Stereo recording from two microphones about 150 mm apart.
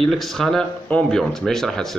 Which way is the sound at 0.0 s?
Centre (ahead or behind).